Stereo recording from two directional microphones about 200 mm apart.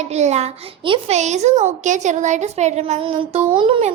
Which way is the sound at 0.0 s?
35° right (ahead or behind).